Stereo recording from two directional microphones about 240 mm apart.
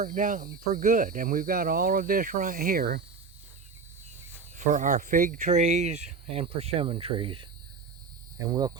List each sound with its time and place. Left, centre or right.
0.0 s speech: right
4.5 s speech: right; by 8.8 s centre